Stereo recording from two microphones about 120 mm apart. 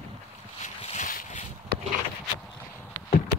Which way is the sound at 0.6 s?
75° left (ahead or behind).